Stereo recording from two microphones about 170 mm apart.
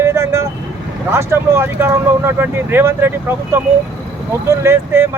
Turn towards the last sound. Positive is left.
turn(degrees=-15)  # may be behind; listen again after turning